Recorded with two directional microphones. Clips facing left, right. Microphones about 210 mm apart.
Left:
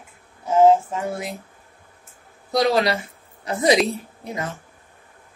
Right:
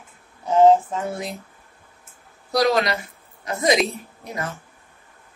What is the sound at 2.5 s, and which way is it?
A woman's voice, 30° left (ahead or behind).